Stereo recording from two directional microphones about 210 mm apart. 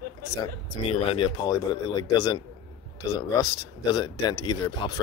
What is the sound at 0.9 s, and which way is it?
Speech, 25° left (ahead or behind).